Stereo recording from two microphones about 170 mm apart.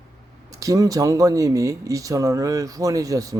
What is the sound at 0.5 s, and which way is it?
Speech, 20° right (ahead or behind).